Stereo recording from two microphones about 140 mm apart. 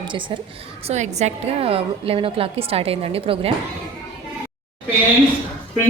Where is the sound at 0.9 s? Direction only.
55° right (ahead or behind).